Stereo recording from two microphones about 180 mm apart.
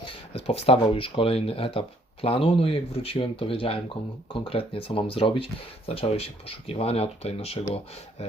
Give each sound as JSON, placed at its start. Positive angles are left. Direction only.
{"t": 0.0, "sound": "speech", "side_deg": 30}